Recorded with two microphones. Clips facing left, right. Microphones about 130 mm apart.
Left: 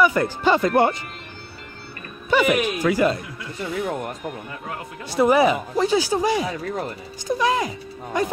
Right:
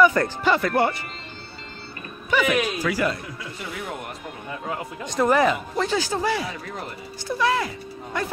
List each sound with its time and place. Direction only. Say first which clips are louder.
0.0 s speech: even; 15° left (ahead or behind)
2.3 s speech: left 3 dB; 20° left (ahead or behind)
5.0 s a man's voice: left 3 dB; 10° left (ahead or behind)